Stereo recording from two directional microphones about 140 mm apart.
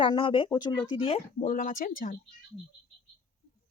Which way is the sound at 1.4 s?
65° left (ahead or behind).